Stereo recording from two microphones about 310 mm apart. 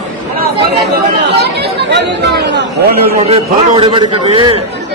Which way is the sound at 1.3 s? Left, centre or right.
Right.